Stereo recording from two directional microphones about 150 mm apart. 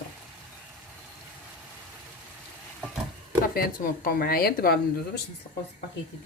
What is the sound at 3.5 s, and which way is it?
A woman's voice, 75° left (ahead or behind).